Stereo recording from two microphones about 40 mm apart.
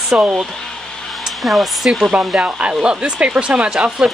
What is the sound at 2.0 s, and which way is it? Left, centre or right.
Speech, right.